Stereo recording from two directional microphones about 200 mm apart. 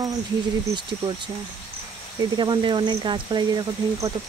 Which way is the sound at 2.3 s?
25° right (ahead or behind).